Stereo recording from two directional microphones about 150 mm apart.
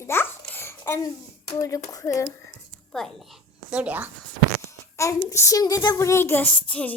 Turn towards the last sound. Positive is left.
turn(degrees=10)  # may be behind; listen again after turning